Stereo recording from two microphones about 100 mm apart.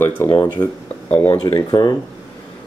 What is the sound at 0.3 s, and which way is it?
Speech, 45° left (ahead or behind).